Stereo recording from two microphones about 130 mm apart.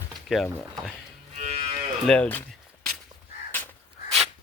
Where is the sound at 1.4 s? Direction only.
55° right (ahead or behind).